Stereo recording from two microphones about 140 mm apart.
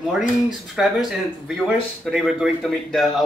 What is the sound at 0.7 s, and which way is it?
Speech, centre (ahead or behind).